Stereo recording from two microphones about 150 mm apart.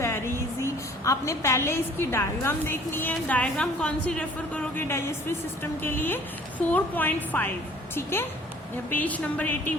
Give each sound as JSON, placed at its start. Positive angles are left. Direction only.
{"t": 0.0, "sound": "a woman's voice", "side_deg": 15}
{"t": 8.9, "sound": "a woman's voice", "side_deg": 10}